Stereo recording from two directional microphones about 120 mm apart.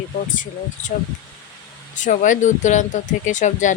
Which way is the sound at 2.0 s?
90° left.